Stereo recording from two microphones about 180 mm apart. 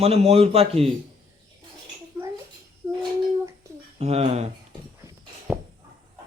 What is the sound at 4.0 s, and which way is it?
Speech, 35° right (ahead or behind).